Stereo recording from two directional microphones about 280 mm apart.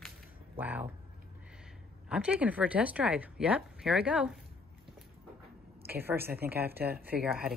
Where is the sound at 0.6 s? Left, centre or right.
Centre.